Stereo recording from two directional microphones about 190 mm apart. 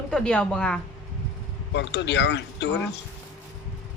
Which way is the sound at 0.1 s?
5° left (ahead or behind).